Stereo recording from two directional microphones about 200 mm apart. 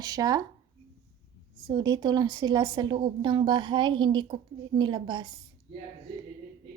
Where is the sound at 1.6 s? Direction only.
20° right (ahead or behind).